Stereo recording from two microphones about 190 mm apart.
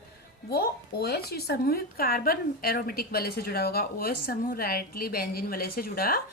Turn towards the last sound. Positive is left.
turn(degrees=50)  # may be behind; listen again after turning